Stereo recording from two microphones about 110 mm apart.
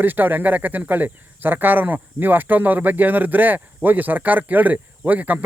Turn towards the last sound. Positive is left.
turn(degrees=-15)  # may be behind; listen again after turning